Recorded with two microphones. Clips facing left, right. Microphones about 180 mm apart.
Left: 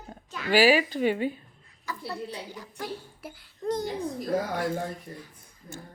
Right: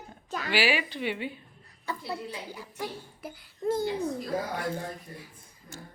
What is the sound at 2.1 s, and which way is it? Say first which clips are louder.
Speech: even; 10° right (ahead or behind).